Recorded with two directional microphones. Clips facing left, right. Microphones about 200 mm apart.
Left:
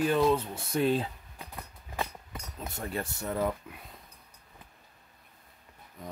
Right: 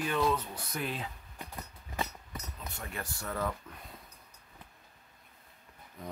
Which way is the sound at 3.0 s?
20° left (ahead or behind).